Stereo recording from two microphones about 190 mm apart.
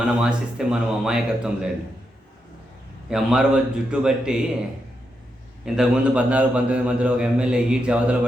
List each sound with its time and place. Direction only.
0.0 s a man's voice: 5° right (ahead or behind)
3.1 s a man's voice: centre (ahead or behind)
5.6 s a man's voice: 5° right (ahead or behind)